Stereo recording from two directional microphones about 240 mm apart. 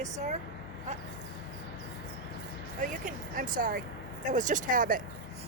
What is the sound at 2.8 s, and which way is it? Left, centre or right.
Speech, right.